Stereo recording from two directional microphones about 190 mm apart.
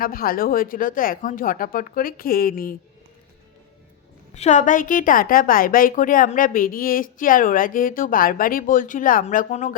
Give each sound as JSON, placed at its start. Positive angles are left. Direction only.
{"t": 0.0, "sound": "a woman's voice", "side_deg": 50}
{"t": 4.4, "sound": "a woman's voice", "side_deg": 40}